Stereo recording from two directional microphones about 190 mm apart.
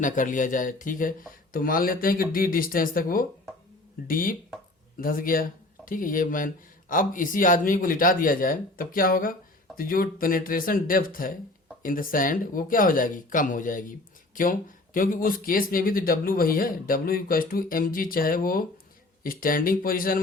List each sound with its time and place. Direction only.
0.0 s speech: 45° left (ahead or behind)